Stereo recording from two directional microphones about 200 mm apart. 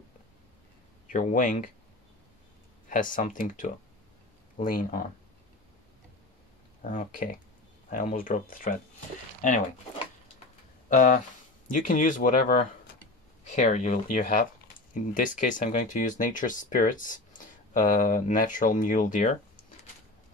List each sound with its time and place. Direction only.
1.1 s speech: 40° left (ahead or behind)
2.9 s speech: 40° left (ahead or behind)
6.8 s speech: 40° left (ahead or behind)
10.9 s speech: 40° left (ahead or behind)